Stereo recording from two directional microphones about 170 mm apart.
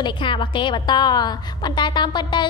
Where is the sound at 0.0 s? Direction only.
30° left (ahead or behind).